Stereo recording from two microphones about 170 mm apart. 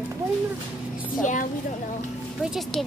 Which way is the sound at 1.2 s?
50° left (ahead or behind).